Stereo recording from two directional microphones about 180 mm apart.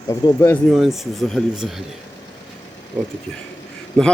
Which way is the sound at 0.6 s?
Centre (ahead or behind).